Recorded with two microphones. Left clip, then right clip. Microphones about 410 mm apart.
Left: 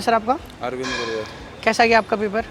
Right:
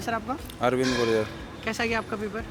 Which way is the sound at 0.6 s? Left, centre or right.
Right.